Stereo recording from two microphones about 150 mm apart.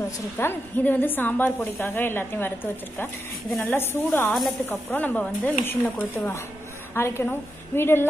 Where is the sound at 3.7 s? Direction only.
15° left (ahead or behind).